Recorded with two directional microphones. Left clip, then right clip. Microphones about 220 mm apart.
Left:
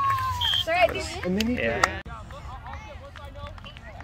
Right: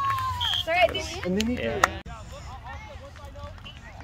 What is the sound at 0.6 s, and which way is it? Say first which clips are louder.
Smoke detector: right 2 dB; 10° left (ahead or behind).